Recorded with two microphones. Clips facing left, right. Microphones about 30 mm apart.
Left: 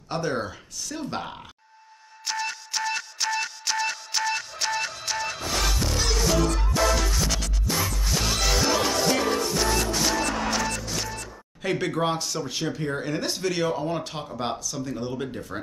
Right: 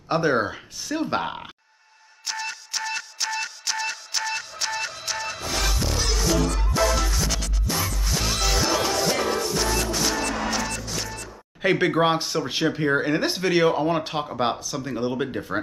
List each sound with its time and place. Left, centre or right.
0.1 s speech: right
2.2 s music: centre
11.6 s speech: right